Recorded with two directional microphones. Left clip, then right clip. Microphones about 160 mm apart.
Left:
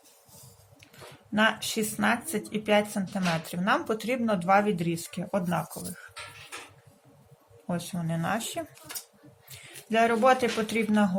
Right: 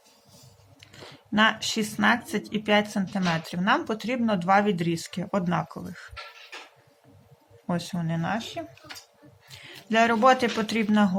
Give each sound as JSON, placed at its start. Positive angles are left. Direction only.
{"t": 0.8, "sound": "speech", "side_deg": -15}
{"t": 7.7, "sound": "speech", "side_deg": -20}
{"t": 9.5, "sound": "a man's voice", "side_deg": -20}